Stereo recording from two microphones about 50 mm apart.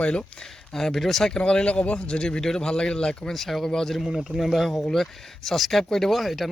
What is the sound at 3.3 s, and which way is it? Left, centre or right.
Speech, centre.